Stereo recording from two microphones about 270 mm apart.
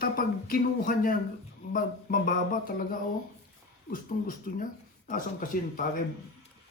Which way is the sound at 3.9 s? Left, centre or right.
Left.